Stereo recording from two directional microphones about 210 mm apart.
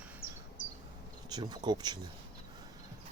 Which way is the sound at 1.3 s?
20° right (ahead or behind).